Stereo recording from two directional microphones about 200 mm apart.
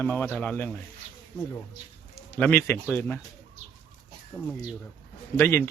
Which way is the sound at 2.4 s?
10° left (ahead or behind).